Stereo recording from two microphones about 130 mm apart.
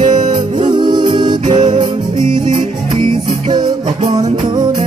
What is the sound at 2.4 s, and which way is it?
Music, 40° right (ahead or behind).